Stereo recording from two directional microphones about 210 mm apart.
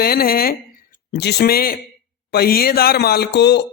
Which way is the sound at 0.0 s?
45° left (ahead or behind).